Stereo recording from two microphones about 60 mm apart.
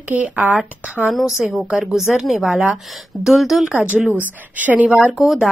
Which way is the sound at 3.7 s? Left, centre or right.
Right.